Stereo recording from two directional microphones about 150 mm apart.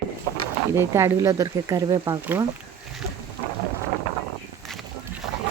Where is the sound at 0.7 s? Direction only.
20° right (ahead or behind).